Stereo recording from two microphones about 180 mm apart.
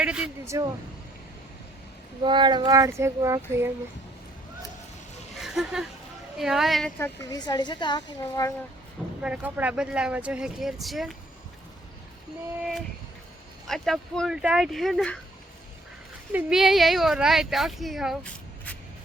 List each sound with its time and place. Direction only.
0.0 s speech: 5° right (ahead or behind)
0.4 s speech: 15° right (ahead or behind)
2.2 s child singing: 25° right (ahead or behind)
5.4 s a sound: centre (ahead or behind)
6.3 s speech: centre (ahead or behind)
7.0 s a woman's voice: 20° left (ahead or behind)
9.2 s speech: 10° right (ahead or behind)
13.7 s speech: centre (ahead or behind)
16.3 s speech: centre (ahead or behind)